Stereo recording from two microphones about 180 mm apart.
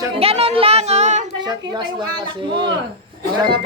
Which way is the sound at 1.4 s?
25° right (ahead or behind).